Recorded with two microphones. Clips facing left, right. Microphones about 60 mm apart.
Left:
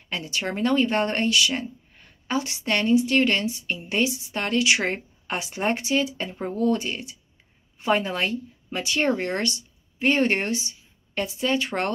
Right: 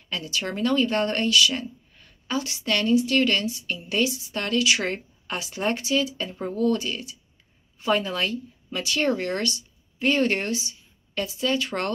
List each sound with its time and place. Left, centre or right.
0.1 s speech: left